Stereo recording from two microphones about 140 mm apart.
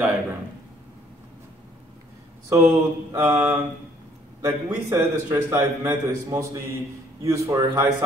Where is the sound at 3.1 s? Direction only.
15° right (ahead or behind).